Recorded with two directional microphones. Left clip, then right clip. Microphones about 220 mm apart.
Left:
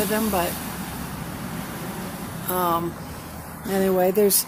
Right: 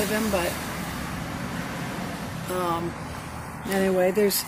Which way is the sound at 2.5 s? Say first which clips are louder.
Left 4 dB; 15° left (ahead or behind).